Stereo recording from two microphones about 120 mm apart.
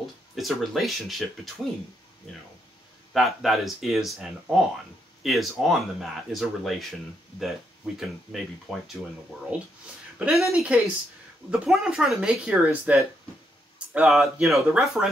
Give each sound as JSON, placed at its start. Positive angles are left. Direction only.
{"t": 0.4, "sound": "speech", "side_deg": 0}
{"t": 3.1, "sound": "speech", "side_deg": 0}
{"t": 10.1, "sound": "speech", "side_deg": -5}